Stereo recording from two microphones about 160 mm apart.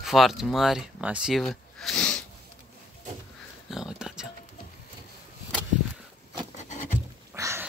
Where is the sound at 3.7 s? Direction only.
5° right (ahead or behind).